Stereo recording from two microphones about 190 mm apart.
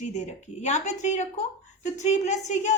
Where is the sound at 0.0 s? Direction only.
40° left (ahead or behind).